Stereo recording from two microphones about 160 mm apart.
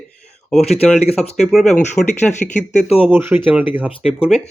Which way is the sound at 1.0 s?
40° left (ahead or behind).